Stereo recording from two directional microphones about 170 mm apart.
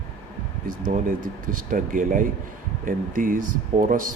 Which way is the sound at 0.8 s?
55° right (ahead or behind).